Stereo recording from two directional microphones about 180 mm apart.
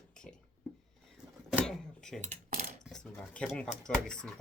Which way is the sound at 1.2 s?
5° right (ahead or behind).